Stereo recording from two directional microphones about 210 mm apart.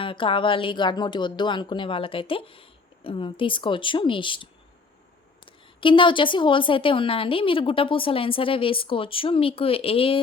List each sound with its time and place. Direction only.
0.0 s a woman's voice: 25° left (ahead or behind)
5.5 s a woman's voice: 25° left (ahead or behind)